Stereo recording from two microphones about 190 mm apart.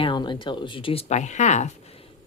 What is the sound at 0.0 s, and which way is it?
Speech, 25° left (ahead or behind).